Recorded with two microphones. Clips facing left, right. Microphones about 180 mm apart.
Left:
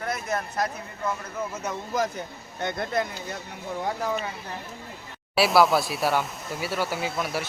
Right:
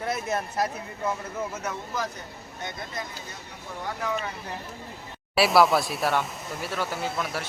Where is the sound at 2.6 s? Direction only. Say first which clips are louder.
Left 9 dB; 65° left (ahead or behind).